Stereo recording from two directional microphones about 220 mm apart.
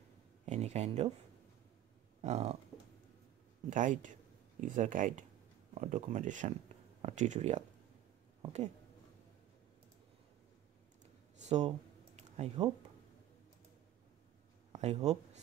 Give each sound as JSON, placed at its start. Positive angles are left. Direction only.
{"t": 0.5, "sound": "speech", "side_deg": -30}
{"t": 2.2, "sound": "speech", "side_deg": -30}
{"t": 3.7, "sound": "speech", "side_deg": -35}
{"t": 11.4, "sound": "speech", "side_deg": -30}
{"t": 12.2, "sound": "computer keyboard", "side_deg": -30}
{"t": 14.7, "sound": "speech", "side_deg": -30}